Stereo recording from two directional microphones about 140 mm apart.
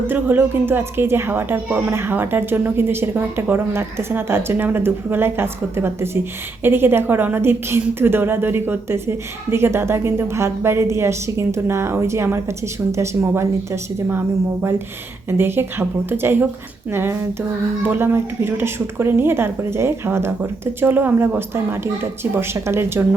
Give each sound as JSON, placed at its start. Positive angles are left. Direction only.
{"t": 0.1, "sound": "a woman's voice", "side_deg": -15}
{"t": 15.3, "sound": "a woman's voice", "side_deg": -15}